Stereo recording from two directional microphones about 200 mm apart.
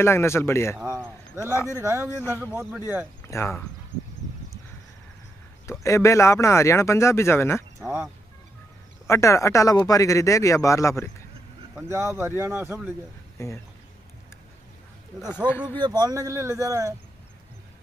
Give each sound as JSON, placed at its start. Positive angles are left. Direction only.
{"t": 0.0, "sound": "speech", "side_deg": 15}
{"t": 0.7, "sound": "a sound", "side_deg": -10}
{"t": 1.4, "sound": "speech", "side_deg": 15}
{"t": 1.7, "sound": "speech", "side_deg": -15}
{"t": 2.0, "sound": "speech", "side_deg": 15}
{"t": 5.7, "sound": "speech", "side_deg": 15}
{"t": 7.8, "sound": "speech", "side_deg": -15}
{"t": 9.0, "sound": "speech", "side_deg": 15}
{"t": 11.7, "sound": "speech", "side_deg": -10}
{"t": 13.4, "sound": "speech", "side_deg": 15}
{"t": 15.8, "sound": "speech", "side_deg": -20}